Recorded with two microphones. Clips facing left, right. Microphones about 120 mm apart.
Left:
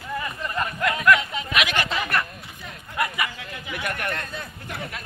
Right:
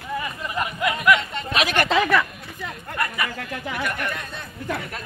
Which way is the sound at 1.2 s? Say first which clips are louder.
Even; 5° left (ahead or behind).